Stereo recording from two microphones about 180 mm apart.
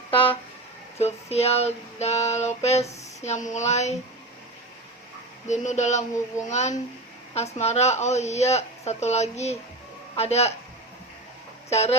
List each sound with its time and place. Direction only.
0.9 s a woman's voice: 35° left (ahead or behind)
5.5 s a woman's voice: 40° left (ahead or behind)
11.7 s a woman's voice: 35° left (ahead or behind)